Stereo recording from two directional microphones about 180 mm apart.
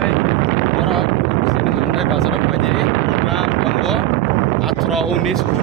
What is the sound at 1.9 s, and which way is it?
Boat, centre (ahead or behind).